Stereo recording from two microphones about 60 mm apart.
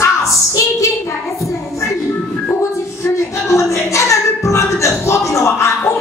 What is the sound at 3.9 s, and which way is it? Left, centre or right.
Music, left.